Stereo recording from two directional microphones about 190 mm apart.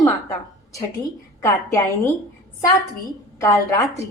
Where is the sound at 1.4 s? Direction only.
15° left (ahead or behind).